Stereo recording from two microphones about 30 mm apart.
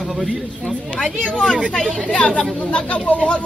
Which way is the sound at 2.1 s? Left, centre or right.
Left.